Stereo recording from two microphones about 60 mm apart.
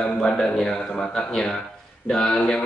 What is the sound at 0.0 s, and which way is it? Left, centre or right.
A man's voice, centre.